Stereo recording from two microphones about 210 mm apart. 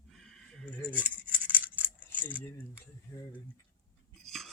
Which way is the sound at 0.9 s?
5° right (ahead or behind).